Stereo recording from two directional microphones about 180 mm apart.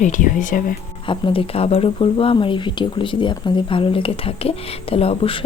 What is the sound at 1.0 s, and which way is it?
Speech, 30° left (ahead or behind).